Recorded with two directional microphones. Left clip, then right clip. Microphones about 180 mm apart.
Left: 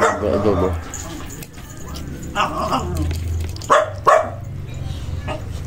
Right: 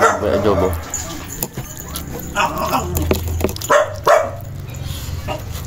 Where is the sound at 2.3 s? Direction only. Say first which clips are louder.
Right 2 dB; 20° right (ahead or behind).